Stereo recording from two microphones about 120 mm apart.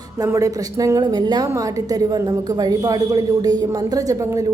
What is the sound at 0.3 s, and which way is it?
A woman's voice, 25° right (ahead or behind).